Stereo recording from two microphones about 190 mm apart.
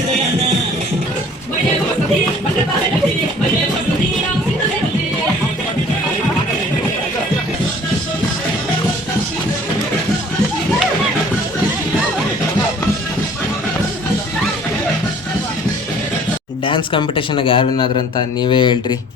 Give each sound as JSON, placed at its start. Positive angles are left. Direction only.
{"t": 16.6, "sound": "a man's voice", "side_deg": 25}